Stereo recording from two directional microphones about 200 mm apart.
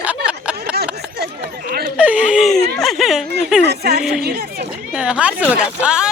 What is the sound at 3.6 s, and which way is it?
Speech, 55° right (ahead or behind).